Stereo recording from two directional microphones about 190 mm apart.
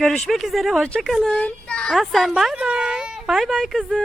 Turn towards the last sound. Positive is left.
turn(degrees=0)  # may be behind; listen again after turning